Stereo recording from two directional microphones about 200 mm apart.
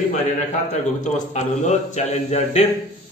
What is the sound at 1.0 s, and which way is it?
A man's voice, 35° left (ahead or behind).